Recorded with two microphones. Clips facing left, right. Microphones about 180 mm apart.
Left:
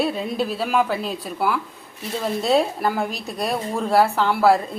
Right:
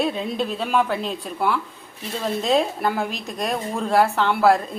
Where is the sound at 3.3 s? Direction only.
Centre (ahead or behind).